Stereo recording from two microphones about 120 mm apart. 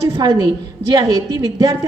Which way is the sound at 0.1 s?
30° right (ahead or behind).